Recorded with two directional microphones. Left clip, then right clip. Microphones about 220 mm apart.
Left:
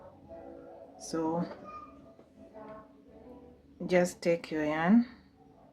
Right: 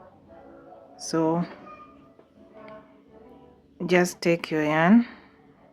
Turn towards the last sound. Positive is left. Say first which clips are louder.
# right 8 dB
turn(degrees=-40)  # may be behind; listen again after turning